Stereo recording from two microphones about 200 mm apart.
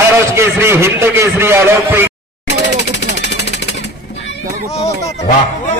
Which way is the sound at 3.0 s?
60° left (ahead or behind).